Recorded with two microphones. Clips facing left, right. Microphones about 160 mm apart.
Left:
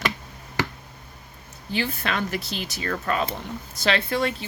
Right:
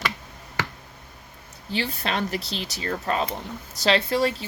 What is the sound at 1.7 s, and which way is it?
Speech, 30° right (ahead or behind).